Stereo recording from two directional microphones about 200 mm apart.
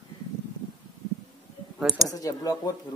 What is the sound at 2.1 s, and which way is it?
Speech, 15° left (ahead or behind).